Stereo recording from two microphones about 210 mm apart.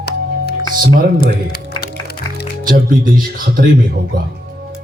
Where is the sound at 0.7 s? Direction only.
45° right (ahead or behind).